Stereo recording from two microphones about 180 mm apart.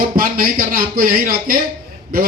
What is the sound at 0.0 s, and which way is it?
A man's voice, 50° right (ahead or behind).